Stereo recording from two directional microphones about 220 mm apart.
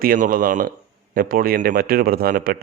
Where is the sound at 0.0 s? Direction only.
40° right (ahead or behind).